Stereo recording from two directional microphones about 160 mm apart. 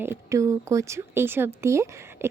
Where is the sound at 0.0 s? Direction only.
15° right (ahead or behind).